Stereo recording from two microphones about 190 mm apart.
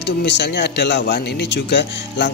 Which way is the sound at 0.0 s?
65° left (ahead or behind).